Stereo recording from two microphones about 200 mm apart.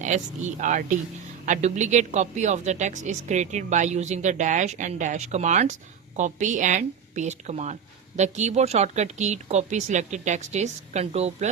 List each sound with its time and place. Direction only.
0.0 s a woman's voice: 40° right (ahead or behind)